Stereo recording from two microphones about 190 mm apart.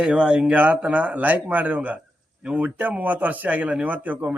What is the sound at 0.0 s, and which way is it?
A man's voice, 5° right (ahead or behind).